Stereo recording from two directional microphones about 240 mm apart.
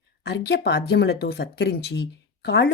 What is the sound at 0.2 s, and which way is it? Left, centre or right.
Speech, left.